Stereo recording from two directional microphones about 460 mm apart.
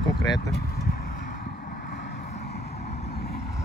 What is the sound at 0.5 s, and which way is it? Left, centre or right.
Vehicle, centre.